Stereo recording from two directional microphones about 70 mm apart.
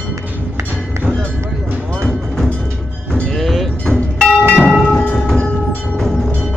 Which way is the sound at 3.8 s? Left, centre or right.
Centre.